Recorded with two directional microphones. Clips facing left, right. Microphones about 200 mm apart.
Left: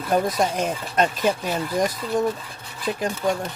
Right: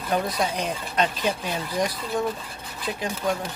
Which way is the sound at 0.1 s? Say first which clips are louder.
Left 4 dB; 45° left (ahead or behind).